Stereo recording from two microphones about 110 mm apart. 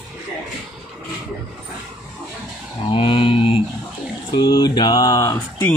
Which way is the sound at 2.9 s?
55° left (ahead or behind).